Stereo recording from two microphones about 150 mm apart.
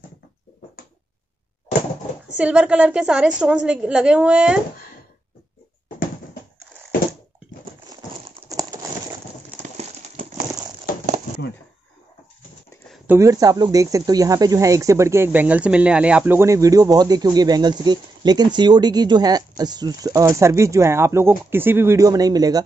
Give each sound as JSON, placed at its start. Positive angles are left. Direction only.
{"t": 2.3, "sound": "a woman's voice", "side_deg": -5}
{"t": 8.5, "sound": "a sound", "side_deg": -25}
{"t": 9.6, "sound": "clip-clop", "side_deg": -60}
{"t": 13.0, "sound": "speech", "side_deg": -15}